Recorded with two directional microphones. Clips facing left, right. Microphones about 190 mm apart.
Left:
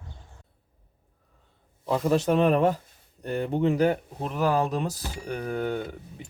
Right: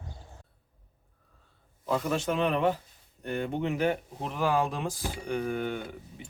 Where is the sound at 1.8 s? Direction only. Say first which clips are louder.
Left 5 dB; 30° left (ahead or behind).